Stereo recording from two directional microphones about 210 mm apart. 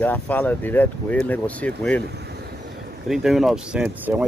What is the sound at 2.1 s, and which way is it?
Vehicle, 50° right (ahead or behind).